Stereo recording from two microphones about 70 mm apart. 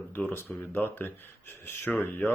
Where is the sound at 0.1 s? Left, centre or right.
Left.